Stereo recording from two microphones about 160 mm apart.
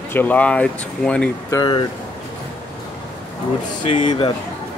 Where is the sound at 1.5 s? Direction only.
30° left (ahead or behind).